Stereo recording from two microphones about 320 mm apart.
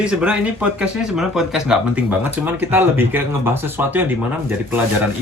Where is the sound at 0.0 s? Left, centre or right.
Centre.